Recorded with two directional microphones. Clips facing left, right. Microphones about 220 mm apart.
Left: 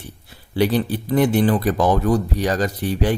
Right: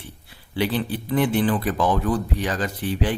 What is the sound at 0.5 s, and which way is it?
Speech, 40° left (ahead or behind).